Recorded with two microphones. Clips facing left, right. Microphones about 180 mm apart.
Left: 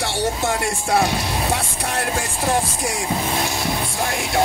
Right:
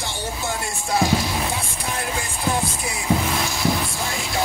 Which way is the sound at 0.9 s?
65° left (ahead or behind).